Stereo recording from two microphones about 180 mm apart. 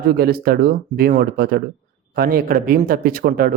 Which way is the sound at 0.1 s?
60° right (ahead or behind).